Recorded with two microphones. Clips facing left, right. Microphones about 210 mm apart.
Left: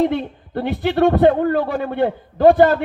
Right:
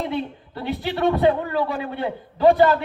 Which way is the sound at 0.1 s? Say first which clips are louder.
Left 4 dB; 55° left (ahead or behind).